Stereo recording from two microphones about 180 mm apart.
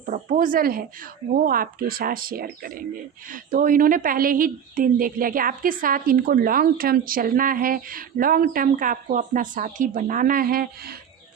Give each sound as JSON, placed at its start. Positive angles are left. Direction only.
{"t": 0.0, "sound": "a woman's voice", "side_deg": -45}